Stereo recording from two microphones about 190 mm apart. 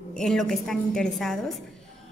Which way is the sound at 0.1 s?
5° left (ahead or behind).